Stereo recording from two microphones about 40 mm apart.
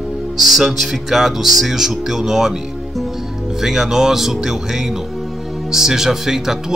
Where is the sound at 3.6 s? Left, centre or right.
Centre.